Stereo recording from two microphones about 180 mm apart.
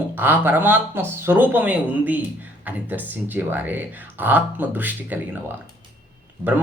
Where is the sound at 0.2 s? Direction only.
10° right (ahead or behind).